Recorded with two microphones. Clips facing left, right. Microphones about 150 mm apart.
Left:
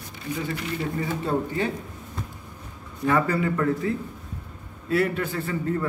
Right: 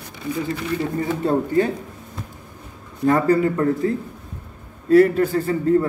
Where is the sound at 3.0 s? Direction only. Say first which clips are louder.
Right 6 dB; 40° right (ahead or behind).